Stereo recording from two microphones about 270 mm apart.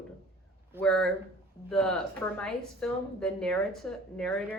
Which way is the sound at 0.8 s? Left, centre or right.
Centre.